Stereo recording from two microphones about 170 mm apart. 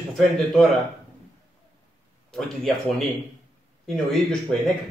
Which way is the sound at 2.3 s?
5° left (ahead or behind).